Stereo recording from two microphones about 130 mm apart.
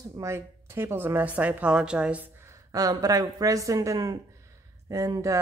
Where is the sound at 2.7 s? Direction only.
30° right (ahead or behind).